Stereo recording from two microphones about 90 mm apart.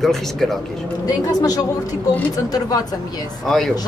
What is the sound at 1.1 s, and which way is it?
A woman's voice, 45° left (ahead or behind).